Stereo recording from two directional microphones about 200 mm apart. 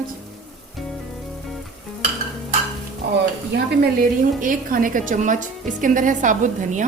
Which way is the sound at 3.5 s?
45° right (ahead or behind).